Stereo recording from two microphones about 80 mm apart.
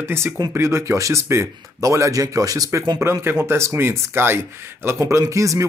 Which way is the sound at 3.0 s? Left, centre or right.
Right.